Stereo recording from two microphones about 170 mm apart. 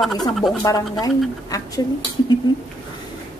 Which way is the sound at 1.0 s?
20° left (ahead or behind).